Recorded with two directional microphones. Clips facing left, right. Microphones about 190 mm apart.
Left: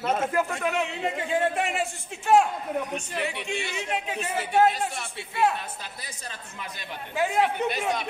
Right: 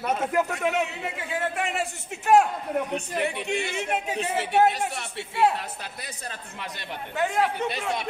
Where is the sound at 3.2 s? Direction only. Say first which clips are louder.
Right 3 dB; 65° right (ahead or behind).